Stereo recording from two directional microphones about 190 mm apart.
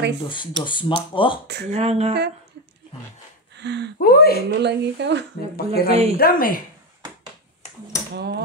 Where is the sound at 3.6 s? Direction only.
65° right (ahead or behind).